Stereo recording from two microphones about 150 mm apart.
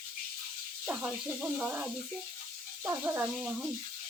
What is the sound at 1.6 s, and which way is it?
Speech, 10° right (ahead or behind).